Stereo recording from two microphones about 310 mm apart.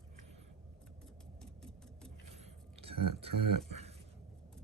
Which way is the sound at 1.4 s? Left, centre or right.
Centre.